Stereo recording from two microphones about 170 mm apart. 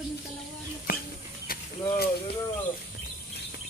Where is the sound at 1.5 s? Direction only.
55° left (ahead or behind).